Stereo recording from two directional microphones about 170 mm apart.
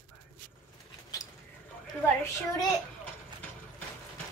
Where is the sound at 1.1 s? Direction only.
20° left (ahead or behind).